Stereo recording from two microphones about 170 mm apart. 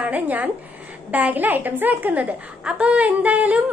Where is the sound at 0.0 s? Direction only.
10° right (ahead or behind).